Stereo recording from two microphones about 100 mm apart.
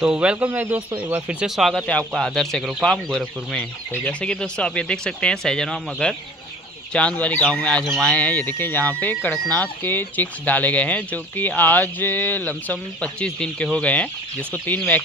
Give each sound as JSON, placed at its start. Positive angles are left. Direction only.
{"t": 0.0, "sound": "speech", "side_deg": -10}
{"t": 1.6, "sound": "speech", "side_deg": 0}
{"t": 1.9, "sound": "speech", "side_deg": 10}